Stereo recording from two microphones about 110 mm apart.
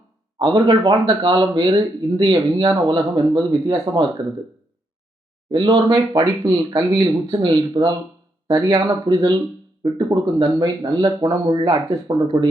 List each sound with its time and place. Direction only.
0.3 s speech: 35° right (ahead or behind)
5.5 s speech: 40° right (ahead or behind)